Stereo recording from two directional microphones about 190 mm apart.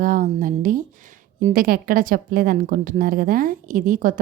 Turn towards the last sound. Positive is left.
turn(degrees=-45)  # may be behind; listen again after turning